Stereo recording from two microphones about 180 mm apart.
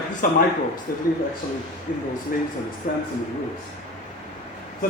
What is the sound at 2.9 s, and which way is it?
Speech, 50° left (ahead or behind).